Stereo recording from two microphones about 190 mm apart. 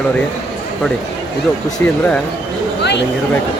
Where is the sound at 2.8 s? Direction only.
65° left (ahead or behind).